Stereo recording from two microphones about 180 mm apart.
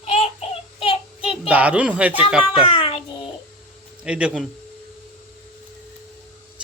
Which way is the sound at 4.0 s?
5° right (ahead or behind).